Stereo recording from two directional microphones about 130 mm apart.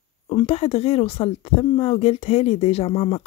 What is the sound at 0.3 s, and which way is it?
Speech, 45° left (ahead or behind).